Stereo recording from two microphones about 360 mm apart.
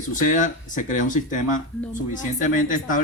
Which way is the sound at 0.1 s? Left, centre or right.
Left.